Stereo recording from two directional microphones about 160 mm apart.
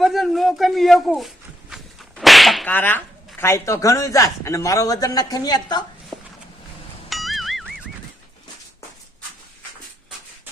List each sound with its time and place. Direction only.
0.0 s a man's voice: centre (ahead or behind)
1.7 s whip: centre (ahead or behind)
2.7 s speech: 10° left (ahead or behind)
7.1 s music: centre (ahead or behind)